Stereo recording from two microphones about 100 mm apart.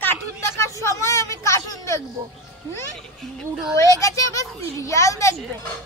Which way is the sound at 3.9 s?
35° left (ahead or behind).